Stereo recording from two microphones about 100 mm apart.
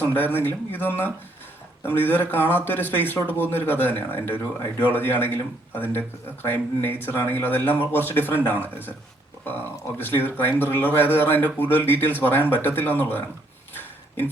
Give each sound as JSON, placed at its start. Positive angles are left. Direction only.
{"t": 0.0, "sound": "speech", "side_deg": 20}